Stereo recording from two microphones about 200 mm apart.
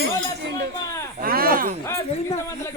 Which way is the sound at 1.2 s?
45° right (ahead or behind).